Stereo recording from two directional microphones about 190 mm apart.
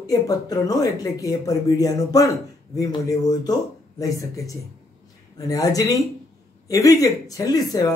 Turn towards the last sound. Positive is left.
turn(degrees=20)  # may be behind; listen again after turning